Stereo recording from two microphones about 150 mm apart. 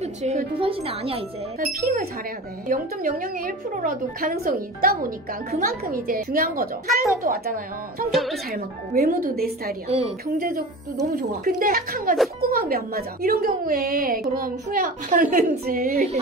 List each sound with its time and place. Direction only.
0.0 s speech: 45° right (ahead or behind)
1.6 s a woman's voice: 65° right (ahead or behind)
8.1 s speech: centre (ahead or behind)
8.5 s speech: 90° right
9.8 s a woman's voice: 45° right (ahead or behind)
10.2 s speech: 90° right
11.1 s a woman's voice: 80° right